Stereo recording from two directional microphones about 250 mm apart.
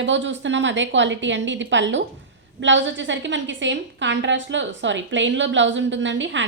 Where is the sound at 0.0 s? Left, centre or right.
Right.